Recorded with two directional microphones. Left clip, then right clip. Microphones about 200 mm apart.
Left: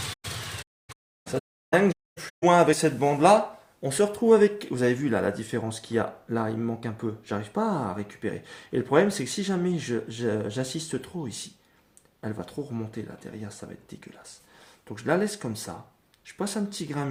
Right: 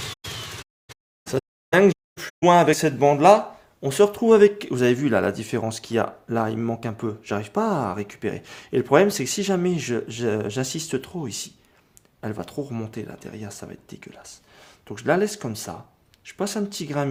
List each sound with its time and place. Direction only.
1.3 s speech: 50° right (ahead or behind); by 17.1 s 35° right (ahead or behind)